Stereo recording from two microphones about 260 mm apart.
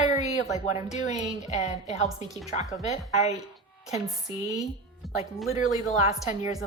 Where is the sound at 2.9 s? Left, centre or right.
Left.